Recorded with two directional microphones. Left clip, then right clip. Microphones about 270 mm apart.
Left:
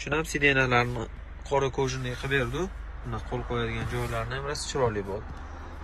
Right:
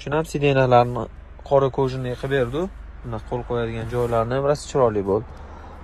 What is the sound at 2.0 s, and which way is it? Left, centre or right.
Speech, centre.